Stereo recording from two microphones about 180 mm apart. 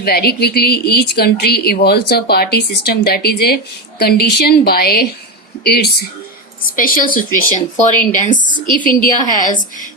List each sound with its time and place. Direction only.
0.0 s a woman's voice: 60° left (ahead or behind)
6.7 s speech: 50° left (ahead or behind)